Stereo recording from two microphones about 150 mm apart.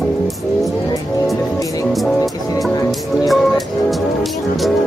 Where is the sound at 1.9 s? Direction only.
Centre (ahead or behind).